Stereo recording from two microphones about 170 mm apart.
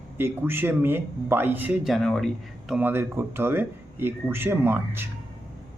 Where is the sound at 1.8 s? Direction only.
Centre (ahead or behind).